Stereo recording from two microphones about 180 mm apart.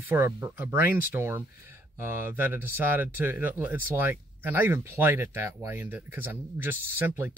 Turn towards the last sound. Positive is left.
turn(degrees=-10)  # may be behind; listen again after turning